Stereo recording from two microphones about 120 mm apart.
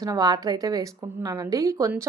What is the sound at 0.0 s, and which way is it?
Speech, 30° right (ahead or behind).